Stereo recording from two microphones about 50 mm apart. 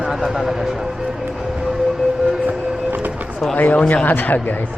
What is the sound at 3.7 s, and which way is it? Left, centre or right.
Speech, left.